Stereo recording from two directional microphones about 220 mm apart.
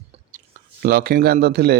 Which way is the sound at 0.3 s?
40° right (ahead or behind).